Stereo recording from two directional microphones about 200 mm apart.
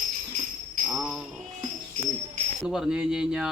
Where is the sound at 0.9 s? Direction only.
5° right (ahead or behind).